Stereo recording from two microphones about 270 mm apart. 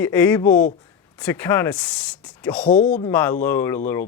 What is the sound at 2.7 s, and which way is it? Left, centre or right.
Speech, left.